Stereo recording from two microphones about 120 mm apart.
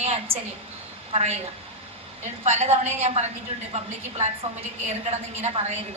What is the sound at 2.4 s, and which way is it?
A woman's voice, 65° right (ahead or behind).